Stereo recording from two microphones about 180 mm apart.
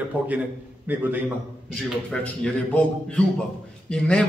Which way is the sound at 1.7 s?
5° left (ahead or behind).